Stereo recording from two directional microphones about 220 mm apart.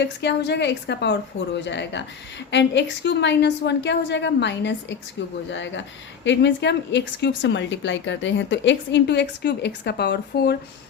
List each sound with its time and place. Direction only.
0.0 s a woman's voice: 50° left (ahead or behind)